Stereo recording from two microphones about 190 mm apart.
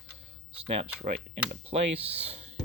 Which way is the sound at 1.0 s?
35° right (ahead or behind).